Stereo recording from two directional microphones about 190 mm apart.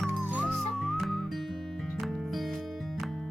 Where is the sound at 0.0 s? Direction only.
10° right (ahead or behind).